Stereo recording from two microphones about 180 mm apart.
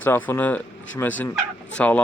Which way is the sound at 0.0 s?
10° left (ahead or behind).